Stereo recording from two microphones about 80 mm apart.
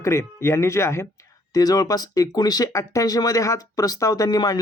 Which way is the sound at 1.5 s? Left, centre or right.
Left.